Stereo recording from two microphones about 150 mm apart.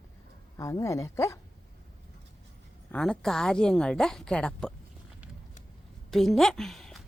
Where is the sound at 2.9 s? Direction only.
5° left (ahead or behind).